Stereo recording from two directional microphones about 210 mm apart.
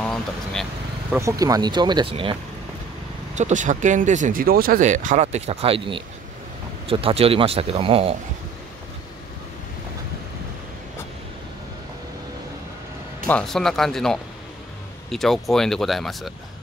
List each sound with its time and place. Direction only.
1.1 s speech: 15° right (ahead or behind)
3.3 s speech: 35° right (ahead or behind)
13.3 s speech: centre (ahead or behind)